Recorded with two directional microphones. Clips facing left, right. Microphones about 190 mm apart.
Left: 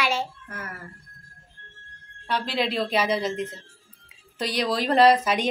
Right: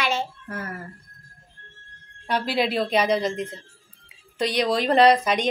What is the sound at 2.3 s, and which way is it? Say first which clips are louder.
Speech: right 3 dB; 5° right (ahead or behind).